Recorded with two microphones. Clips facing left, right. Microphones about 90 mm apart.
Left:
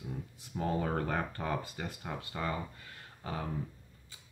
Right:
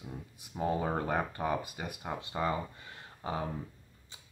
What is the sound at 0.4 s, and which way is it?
Speech, 15° right (ahead or behind).